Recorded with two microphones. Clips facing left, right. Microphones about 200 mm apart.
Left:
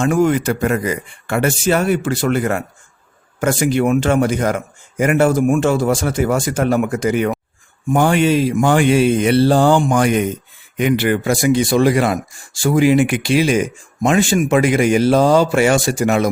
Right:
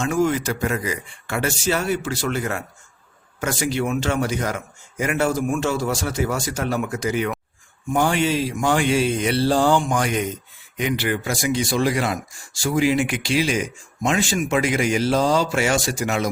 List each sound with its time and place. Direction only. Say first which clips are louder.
0.0 s a man's voice: left 6 dB; 55° left (ahead or behind)